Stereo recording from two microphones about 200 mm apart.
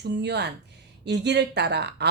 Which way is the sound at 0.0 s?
55° right (ahead or behind).